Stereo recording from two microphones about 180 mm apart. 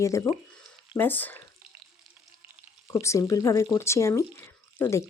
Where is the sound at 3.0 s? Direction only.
15° left (ahead or behind).